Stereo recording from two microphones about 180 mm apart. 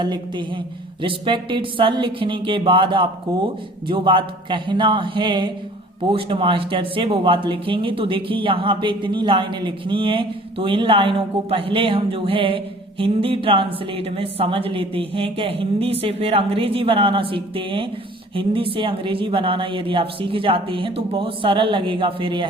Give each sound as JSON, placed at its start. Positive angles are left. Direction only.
{"t": 0.0, "sound": "speech", "side_deg": -25}